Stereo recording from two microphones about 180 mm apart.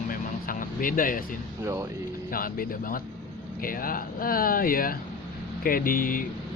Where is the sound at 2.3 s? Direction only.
50° left (ahead or behind).